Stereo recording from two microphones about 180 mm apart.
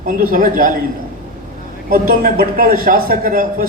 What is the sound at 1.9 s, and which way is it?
A man's voice, 55° right (ahead or behind).